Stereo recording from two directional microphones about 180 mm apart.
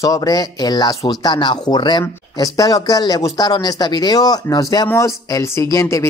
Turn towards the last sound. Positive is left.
turn(degrees=15)  # may be behind; listen again after turning